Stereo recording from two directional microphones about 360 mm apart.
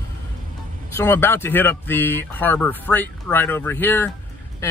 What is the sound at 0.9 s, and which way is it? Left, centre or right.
Speech, centre.